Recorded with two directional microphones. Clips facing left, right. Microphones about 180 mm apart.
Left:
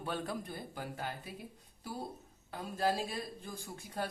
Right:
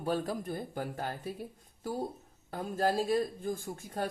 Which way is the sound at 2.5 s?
45° right (ahead or behind).